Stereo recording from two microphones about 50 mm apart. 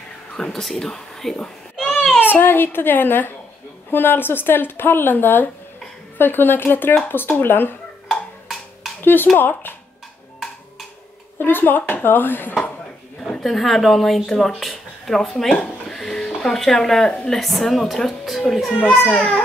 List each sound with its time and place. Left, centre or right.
0.5 s speech: centre
1.3 s a sound: centre
2.1 s speech: left
8.1 s percussion: centre
9.0 s speech: left
11.3 s speech: left
13.2 s speech: centre
15.9 s a sound: centre
16.3 s speech: centre
18.7 s a child's voice: left